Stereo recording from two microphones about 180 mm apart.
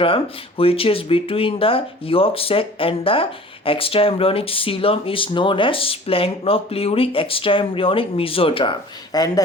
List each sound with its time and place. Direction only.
0.0 s speech: 30° left (ahead or behind)
9.1 s speech: 20° left (ahead or behind)